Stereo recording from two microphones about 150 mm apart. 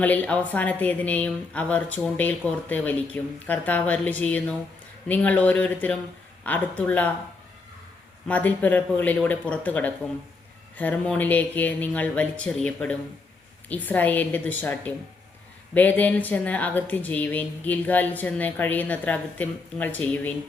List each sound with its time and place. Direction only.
0.0 s a woman's voice: 10° left (ahead or behind)
8.3 s a woman's voice: 10° left (ahead or behind)